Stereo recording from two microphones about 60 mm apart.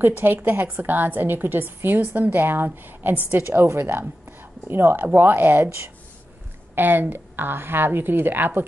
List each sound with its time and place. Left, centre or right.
0.0 s a woman's voice: right